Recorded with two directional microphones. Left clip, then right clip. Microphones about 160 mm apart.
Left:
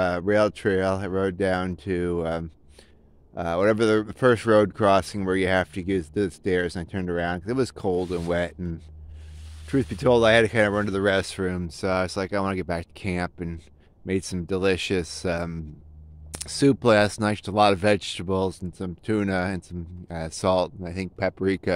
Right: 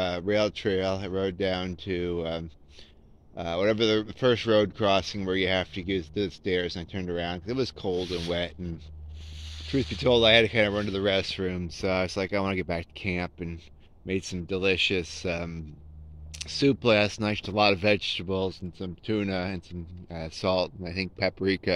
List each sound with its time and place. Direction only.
0.0 s speech: 60° left (ahead or behind)
8.3 s speech: 50° left (ahead or behind); by 11.7 s 35° left (ahead or behind)
11.8 s speech: 20° left (ahead or behind)
13.1 s speech: 35° left (ahead or behind)
14.1 s speech: 45° left (ahead or behind)
18.5 s speech: 90° left
19.0 s speech: 45° left (ahead or behind)
20.8 s speech: 25° left (ahead or behind)